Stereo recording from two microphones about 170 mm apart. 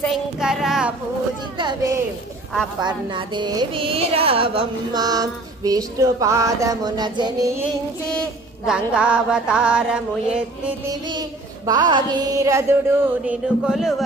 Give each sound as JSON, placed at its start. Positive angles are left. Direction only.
{"t": 0.0, "sound": "child singing", "side_deg": 0}
{"t": 1.6, "sound": "a child's voice", "side_deg": -25}
{"t": 2.8, "sound": "music", "side_deg": -25}
{"t": 8.1, "sound": "a woman's voice", "side_deg": 5}
{"t": 8.7, "sound": "mantra", "side_deg": -5}
{"t": 10.9, "sound": "music", "side_deg": -25}
{"t": 13.2, "sound": "mantra", "side_deg": -5}